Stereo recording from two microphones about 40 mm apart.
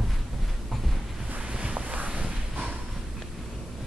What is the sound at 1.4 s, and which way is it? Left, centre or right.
Boat, right.